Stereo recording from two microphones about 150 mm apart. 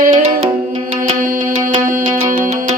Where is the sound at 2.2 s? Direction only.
60° right (ahead or behind).